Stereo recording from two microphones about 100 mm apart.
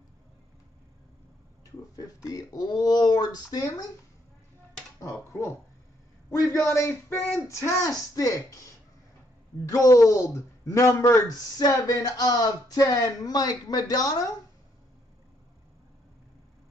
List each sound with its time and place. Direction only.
1.6 s speech: 35° left (ahead or behind)
6.4 s a man's voice: 30° left (ahead or behind)
9.7 s speech: 35° left (ahead or behind)